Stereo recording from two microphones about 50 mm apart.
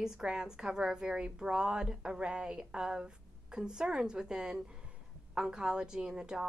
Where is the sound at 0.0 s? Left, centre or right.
Centre.